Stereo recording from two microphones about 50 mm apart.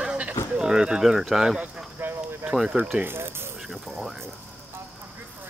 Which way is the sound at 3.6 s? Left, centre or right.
Centre.